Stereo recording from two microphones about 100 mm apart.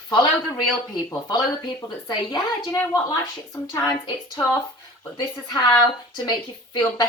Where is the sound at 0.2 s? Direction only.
50° left (ahead or behind).